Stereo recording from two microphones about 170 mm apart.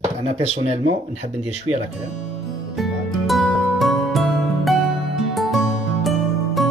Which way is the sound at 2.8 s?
Centre (ahead or behind).